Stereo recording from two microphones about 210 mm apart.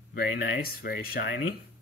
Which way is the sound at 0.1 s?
50° left (ahead or behind).